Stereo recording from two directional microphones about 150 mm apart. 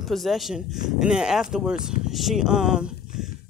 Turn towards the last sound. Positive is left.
turn(degrees=-5)  # may be behind; listen again after turning